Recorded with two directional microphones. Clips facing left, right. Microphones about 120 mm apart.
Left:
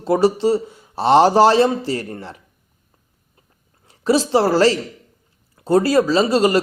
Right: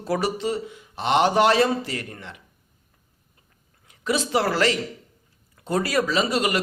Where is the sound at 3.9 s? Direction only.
35° left (ahead or behind).